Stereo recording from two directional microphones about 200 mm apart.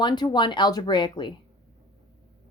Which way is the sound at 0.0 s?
20° left (ahead or behind).